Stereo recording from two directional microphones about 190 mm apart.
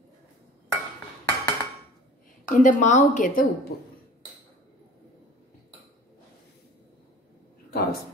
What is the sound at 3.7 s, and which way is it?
Speech, 50° left (ahead or behind).